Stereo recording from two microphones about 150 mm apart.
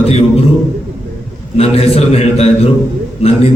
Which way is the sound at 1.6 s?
40° left (ahead or behind).